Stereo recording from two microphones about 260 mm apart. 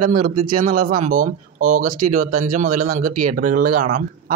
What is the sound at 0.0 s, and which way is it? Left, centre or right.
Speech, right.